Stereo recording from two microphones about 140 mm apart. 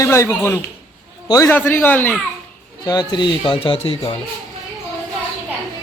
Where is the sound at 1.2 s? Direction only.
25° left (ahead or behind).